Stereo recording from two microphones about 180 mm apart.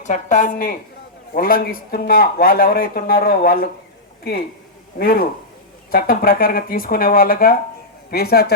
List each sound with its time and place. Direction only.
0.0 s a woman's voice: 45° left (ahead or behind)
4.9 s speech: 55° left (ahead or behind)